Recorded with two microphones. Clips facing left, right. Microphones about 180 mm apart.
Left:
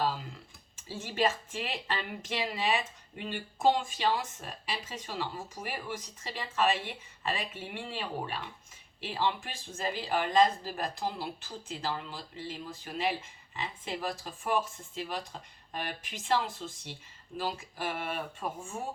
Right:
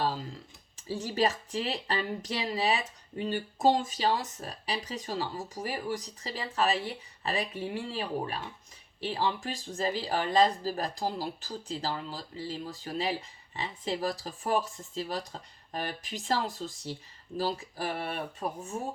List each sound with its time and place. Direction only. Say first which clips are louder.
0.0 s speech: right 1 dB; 40° right (ahead or behind)
13.6 s speech: right 4 dB; 35° right (ahead or behind)